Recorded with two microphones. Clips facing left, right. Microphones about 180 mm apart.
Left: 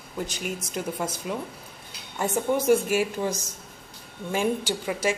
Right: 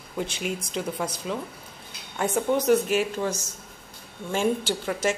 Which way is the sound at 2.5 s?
10° left (ahead or behind).